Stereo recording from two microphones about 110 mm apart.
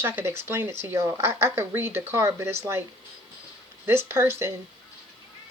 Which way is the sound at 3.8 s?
20° right (ahead or behind).